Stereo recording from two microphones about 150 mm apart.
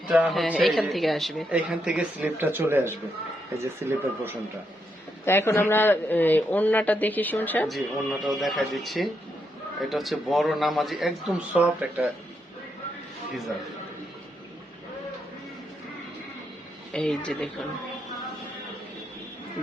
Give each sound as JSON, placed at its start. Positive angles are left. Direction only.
{"t": 0.1, "sound": "speech", "side_deg": -5}
{"t": 5.2, "sound": "speech", "side_deg": 15}
{"t": 7.7, "sound": "speech", "side_deg": 0}
{"t": 16.9, "sound": "speech", "side_deg": 5}